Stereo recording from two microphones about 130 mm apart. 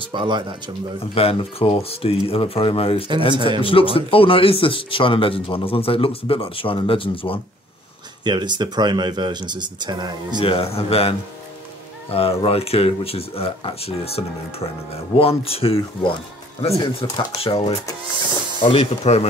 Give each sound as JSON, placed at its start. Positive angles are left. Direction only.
{"t": 0.0, "sound": "speech", "side_deg": -40}
{"t": 1.1, "sound": "speech", "side_deg": 45}
{"t": 8.2, "sound": "speech", "side_deg": -35}
{"t": 10.4, "sound": "speech", "side_deg": 45}